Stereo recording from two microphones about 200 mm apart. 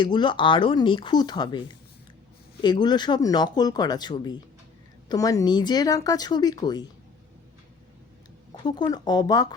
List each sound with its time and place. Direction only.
0.0 s speech: 25° left (ahead or behind)
8.6 s speech: 20° left (ahead or behind)